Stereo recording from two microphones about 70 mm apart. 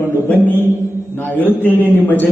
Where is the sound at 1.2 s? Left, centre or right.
Left.